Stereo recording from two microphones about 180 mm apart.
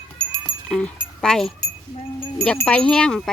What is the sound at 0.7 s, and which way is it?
Speech, 5° left (ahead or behind).